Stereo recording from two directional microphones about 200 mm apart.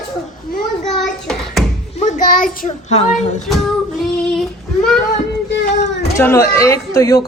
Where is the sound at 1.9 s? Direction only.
40° left (ahead or behind).